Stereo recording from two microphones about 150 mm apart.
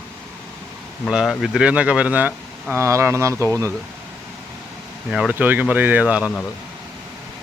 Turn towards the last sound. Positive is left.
turn(degrees=-10)  # may be behind; listen again after turning